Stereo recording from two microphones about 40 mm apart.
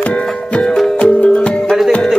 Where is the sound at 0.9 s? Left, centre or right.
Left.